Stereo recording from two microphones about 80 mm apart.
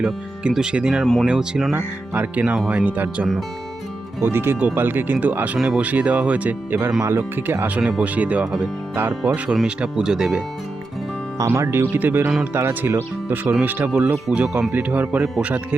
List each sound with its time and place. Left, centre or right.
0.0 s speech: centre
1.0 s speech: centre
1.3 s speech: centre
1.7 s speech: right
4.2 s speech: right
7.9 s speech: centre
11.3 s speech: right; by 15.6 s centre